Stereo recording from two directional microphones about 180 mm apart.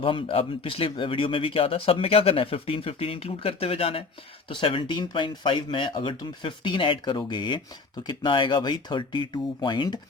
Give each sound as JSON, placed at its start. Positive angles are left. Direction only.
{"t": 0.0, "sound": "speech", "side_deg": 30}